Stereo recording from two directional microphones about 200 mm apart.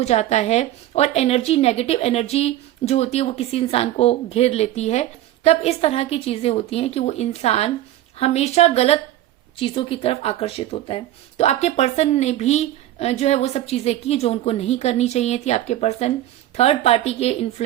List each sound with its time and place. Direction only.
0.0 s a woman's voice: 35° left (ahead or behind)